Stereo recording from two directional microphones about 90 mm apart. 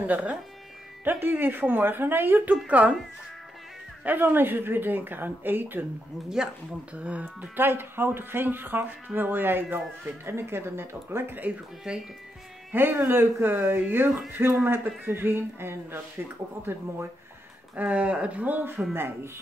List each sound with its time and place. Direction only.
0.0 s speech: 15° right (ahead or behind)
4.0 s speech: 20° right (ahead or behind)
6.2 s speech: 5° right (ahead or behind)
12.7 s speech: 25° right (ahead or behind)
17.7 s speech: 15° right (ahead or behind)